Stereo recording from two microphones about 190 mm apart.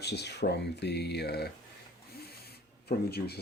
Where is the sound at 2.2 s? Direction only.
55° left (ahead or behind).